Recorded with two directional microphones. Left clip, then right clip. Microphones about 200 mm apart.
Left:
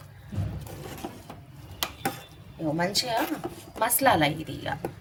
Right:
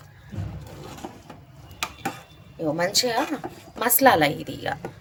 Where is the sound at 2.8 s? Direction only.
45° right (ahead or behind).